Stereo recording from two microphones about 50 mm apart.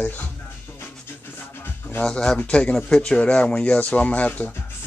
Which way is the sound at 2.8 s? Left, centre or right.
Centre.